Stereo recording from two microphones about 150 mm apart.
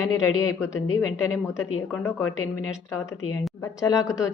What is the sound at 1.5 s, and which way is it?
A woman's voice, 15° left (ahead or behind).